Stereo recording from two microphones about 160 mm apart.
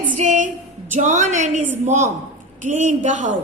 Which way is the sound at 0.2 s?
50° right (ahead or behind).